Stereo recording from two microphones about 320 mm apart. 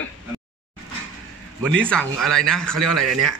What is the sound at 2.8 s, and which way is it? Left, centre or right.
Speech, right.